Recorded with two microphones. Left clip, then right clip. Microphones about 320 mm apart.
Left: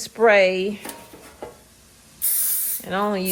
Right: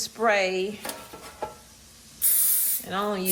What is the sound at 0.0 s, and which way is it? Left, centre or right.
Speech, left.